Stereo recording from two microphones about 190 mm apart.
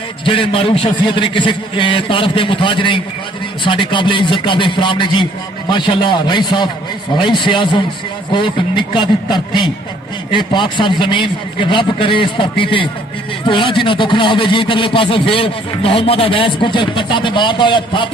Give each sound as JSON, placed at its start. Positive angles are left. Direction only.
{"t": 0.3, "sound": "speech", "side_deg": 30}